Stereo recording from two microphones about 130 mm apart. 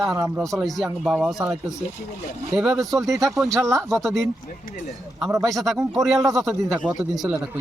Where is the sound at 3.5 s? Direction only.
20° right (ahead or behind).